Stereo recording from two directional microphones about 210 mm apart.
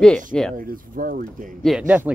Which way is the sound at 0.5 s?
40° right (ahead or behind).